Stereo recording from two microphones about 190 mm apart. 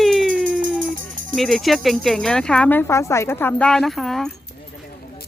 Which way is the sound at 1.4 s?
Centre (ahead or behind).